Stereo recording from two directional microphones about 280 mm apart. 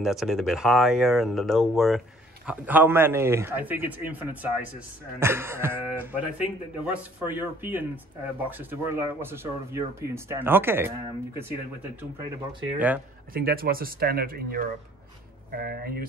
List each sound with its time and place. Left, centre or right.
0.0 s speech: centre
12.7 s speech: centre
13.3 s speech: right